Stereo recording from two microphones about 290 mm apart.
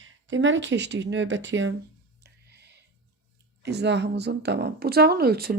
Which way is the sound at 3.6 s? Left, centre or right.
Right.